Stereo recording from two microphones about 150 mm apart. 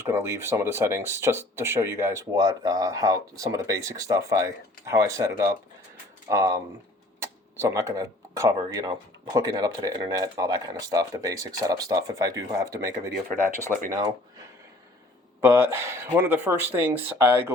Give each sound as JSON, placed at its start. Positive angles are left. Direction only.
{"t": 0.0, "sound": "speech", "side_deg": -15}
{"t": 13.7, "sound": "speech", "side_deg": -60}
{"t": 15.4, "sound": "speech", "side_deg": -15}